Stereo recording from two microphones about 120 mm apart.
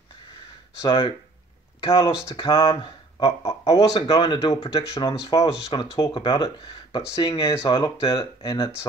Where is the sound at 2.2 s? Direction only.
40° left (ahead or behind).